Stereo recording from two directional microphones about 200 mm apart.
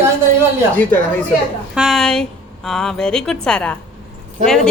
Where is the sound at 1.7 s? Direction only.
Centre (ahead or behind).